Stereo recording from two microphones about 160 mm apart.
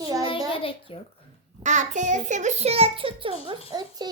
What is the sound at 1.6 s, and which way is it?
A child's voice, 50° right (ahead or behind).